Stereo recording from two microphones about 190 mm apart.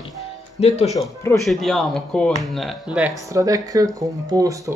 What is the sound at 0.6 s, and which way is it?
Speech, 35° left (ahead or behind).